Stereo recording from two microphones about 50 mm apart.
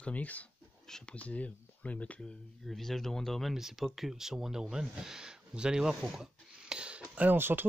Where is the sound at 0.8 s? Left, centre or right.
Centre.